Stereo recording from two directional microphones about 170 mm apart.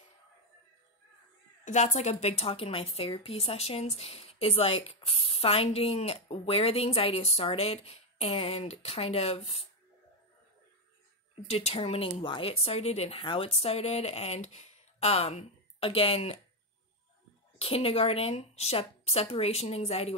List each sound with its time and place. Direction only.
1.6 s speech: 45° left (ahead or behind)
11.4 s speech: 35° left (ahead or behind)
17.6 s speech: 35° left (ahead or behind)